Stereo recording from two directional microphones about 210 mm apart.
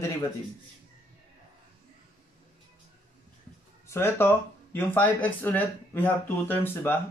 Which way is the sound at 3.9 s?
10° left (ahead or behind).